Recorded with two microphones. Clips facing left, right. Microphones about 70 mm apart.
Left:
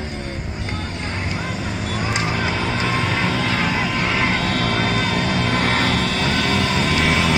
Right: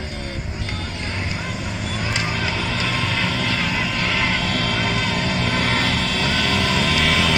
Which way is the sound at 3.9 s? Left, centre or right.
Left.